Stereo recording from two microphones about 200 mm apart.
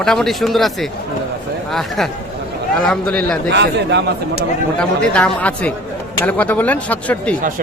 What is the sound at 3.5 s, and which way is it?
Speech, 60° right (ahead or behind).